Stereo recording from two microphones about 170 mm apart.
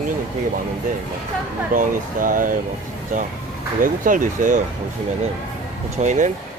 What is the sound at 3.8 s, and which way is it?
Speech, 50° right (ahead or behind).